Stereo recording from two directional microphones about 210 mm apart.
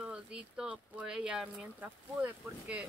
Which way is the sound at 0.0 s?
5° right (ahead or behind).